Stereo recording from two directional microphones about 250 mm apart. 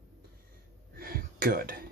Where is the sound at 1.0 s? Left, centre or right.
Right.